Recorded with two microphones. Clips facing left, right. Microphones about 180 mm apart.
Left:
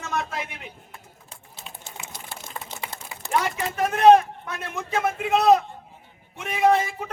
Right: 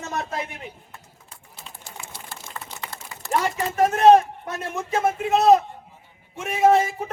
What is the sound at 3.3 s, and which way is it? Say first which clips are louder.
A man's voice: right 1 dB; 40° right (ahead or behind).